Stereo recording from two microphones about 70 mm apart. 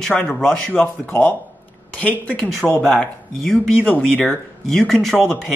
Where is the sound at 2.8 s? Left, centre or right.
Centre.